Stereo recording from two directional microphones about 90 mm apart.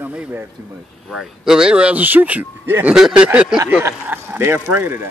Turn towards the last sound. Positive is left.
turn(degrees=-25)  # may be behind; listen again after turning